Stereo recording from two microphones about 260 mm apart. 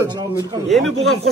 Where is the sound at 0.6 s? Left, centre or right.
Centre.